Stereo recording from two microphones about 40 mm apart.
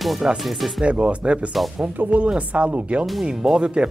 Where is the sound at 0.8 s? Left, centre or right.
Right.